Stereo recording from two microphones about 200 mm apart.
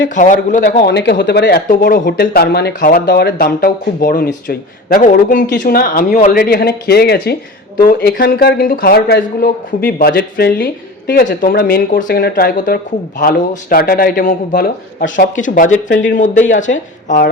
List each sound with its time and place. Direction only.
0.1 s speech: 40° left (ahead or behind)